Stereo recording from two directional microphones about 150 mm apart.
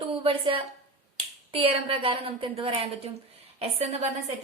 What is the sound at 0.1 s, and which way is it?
A woman's voice, 40° right (ahead or behind).